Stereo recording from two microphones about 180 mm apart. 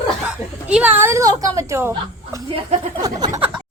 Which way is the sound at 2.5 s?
40° right (ahead or behind).